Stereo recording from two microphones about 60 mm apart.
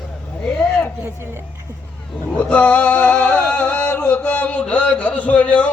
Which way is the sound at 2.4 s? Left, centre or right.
Left.